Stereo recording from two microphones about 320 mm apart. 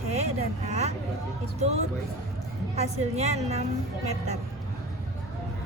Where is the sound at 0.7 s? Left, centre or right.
Right.